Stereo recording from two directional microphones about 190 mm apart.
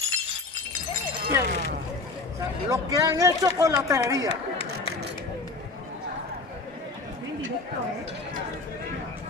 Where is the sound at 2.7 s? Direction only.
20° right (ahead or behind).